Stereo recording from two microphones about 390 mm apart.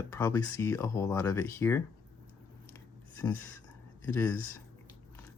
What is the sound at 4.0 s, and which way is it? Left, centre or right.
Speech, centre.